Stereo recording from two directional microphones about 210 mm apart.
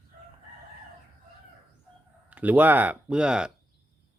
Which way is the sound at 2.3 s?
10° right (ahead or behind).